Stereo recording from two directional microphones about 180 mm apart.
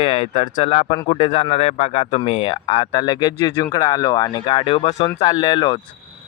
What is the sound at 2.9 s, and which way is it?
Speech, 25° left (ahead or behind).